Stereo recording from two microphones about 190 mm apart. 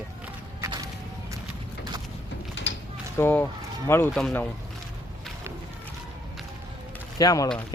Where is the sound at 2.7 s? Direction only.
75° left (ahead or behind).